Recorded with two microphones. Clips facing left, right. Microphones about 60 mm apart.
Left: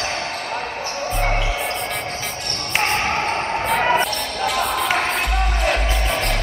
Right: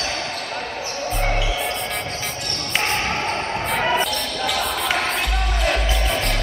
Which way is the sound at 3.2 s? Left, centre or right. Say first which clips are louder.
Left 2 dB; left.